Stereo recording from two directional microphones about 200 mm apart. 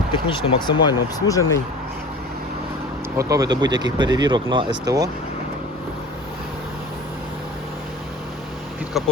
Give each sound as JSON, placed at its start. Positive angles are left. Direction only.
{"t": 0.1, "sound": "speech", "side_deg": 25}
{"t": 3.2, "sound": "speech", "side_deg": -15}